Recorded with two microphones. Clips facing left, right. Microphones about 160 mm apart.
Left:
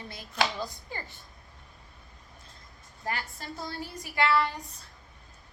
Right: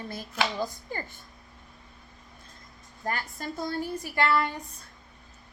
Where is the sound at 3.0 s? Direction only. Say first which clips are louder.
Right 3 dB; 45° right (ahead or behind).